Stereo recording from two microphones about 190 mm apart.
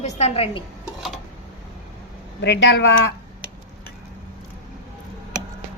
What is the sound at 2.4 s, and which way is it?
Speech, 65° left (ahead or behind).